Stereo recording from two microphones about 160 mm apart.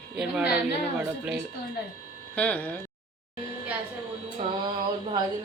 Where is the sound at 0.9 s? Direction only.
10° right (ahead or behind).